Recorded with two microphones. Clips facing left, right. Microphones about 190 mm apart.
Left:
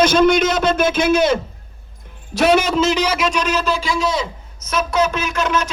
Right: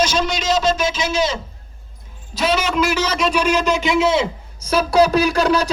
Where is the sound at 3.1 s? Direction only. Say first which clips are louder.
Right 2 dB; 5° right (ahead or behind).